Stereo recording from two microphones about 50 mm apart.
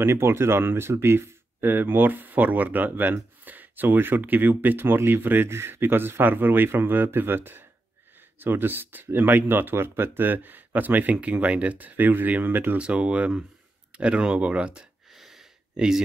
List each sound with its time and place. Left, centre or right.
0.0 s speech: right
12.7 s speech: right
15.1 s a sound: centre
15.7 s speech: centre